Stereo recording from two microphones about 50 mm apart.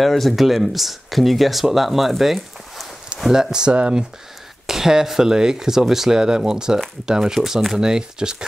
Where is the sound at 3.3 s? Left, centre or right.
Centre.